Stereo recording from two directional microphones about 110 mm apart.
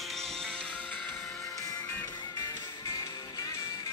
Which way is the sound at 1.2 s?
30° left (ahead or behind).